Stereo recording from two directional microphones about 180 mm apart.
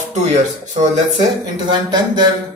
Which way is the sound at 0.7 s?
40° right (ahead or behind).